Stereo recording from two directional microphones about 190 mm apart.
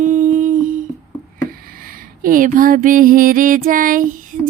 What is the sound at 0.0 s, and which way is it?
Humming, 45° right (ahead or behind).